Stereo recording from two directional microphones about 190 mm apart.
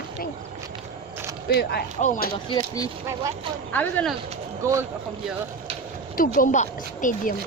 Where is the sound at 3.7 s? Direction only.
10° left (ahead or behind).